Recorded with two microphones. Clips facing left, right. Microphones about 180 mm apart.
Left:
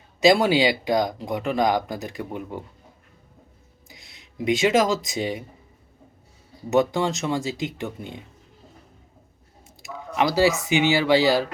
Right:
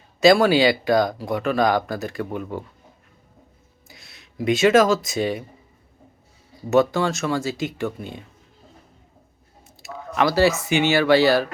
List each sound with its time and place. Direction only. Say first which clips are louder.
0.2 s speech: right 3 dB; 15° left (ahead or behind)
3.8 s speech: right 1 dB; 15° left (ahead or behind)
6.7 s speech: right 2 dB; 15° left (ahead or behind)
9.8 s speech: right 2 dB; 15° left (ahead or behind)